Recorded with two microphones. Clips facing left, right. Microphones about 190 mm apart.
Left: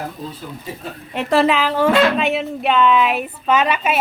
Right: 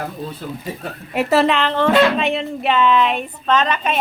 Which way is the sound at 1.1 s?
5° right (ahead or behind).